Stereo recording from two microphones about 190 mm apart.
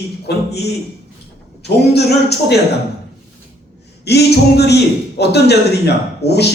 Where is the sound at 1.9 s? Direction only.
60° left (ahead or behind).